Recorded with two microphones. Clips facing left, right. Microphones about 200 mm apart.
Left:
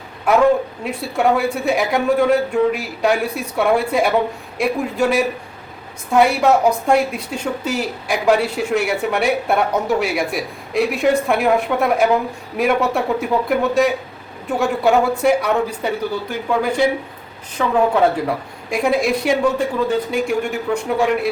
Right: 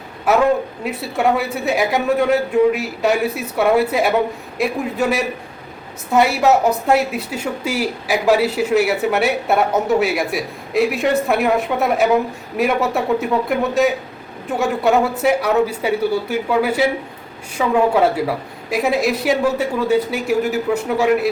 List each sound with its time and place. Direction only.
0.9 s a woman's voice: centre (ahead or behind)